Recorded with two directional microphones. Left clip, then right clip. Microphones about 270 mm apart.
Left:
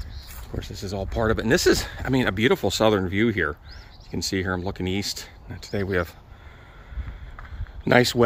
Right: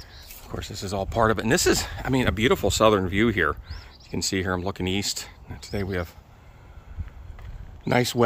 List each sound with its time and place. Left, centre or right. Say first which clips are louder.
0.5 s speech: right 2 dB; centre
7.8 s speech: left 5 dB; centre